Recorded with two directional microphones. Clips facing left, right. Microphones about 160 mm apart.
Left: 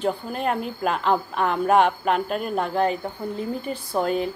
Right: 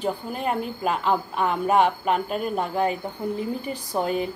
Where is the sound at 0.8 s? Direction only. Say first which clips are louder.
Left 2 dB; 10° right (ahead or behind).